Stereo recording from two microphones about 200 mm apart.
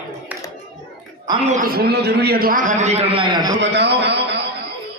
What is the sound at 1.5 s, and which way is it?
A man's voice, 50° right (ahead or behind).